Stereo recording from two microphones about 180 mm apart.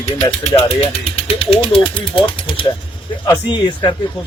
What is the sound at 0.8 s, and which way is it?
Speech, 35° left (ahead or behind).